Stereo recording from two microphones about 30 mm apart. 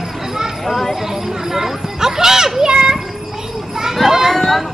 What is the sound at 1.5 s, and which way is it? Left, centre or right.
Speech, centre.